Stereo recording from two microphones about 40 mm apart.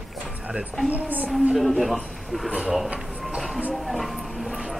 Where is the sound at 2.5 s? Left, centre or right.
Right.